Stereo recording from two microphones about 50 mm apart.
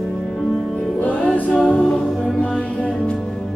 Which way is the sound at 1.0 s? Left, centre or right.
Left.